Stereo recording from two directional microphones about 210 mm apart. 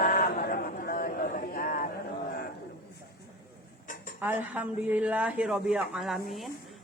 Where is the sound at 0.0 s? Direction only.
40° left (ahead or behind).